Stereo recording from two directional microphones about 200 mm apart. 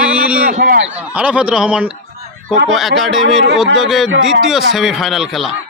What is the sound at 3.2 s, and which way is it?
Speech, 60° right (ahead or behind).